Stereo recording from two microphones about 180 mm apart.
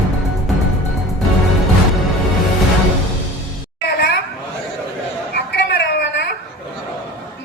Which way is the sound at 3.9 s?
70° left (ahead or behind).